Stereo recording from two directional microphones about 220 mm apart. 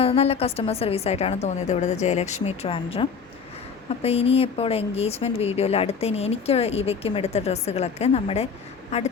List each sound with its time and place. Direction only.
0.0 s speech: 25° left (ahead or behind)